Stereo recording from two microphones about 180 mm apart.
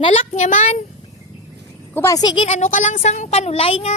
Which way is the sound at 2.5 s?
40° left (ahead or behind).